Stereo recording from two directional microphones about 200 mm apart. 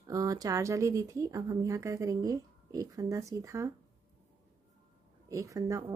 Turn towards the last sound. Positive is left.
turn(degrees=-15)  # may be behind; listen again after turning